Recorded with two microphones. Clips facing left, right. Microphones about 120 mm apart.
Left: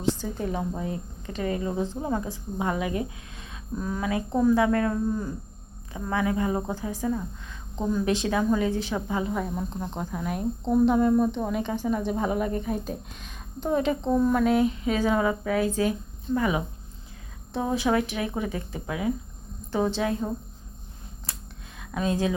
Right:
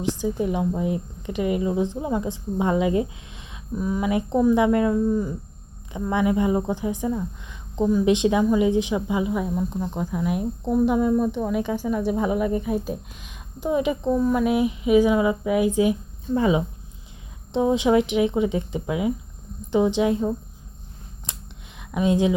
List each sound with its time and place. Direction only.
0.2 s a woman's voice: 15° right (ahead or behind)
16.3 s a woman's voice: 25° right (ahead or behind)
21.3 s a sound: 20° right (ahead or behind)